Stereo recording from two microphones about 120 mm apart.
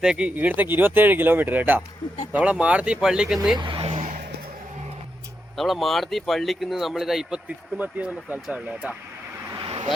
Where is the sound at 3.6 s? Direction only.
45° right (ahead or behind).